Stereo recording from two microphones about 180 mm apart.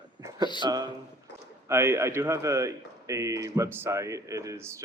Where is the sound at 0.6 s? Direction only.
20° right (ahead or behind).